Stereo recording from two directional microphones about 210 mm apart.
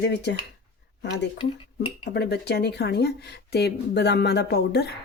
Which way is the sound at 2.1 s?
50° left (ahead or behind).